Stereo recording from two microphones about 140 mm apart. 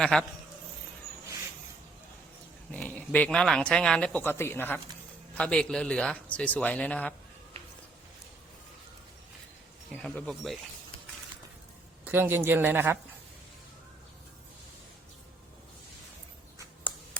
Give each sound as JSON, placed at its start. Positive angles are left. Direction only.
{"t": 0.0, "sound": "speech", "side_deg": 5}
{"t": 2.7, "sound": "speech", "side_deg": 10}
{"t": 9.9, "sound": "speech", "side_deg": 5}
{"t": 12.0, "sound": "a man's voice", "side_deg": -15}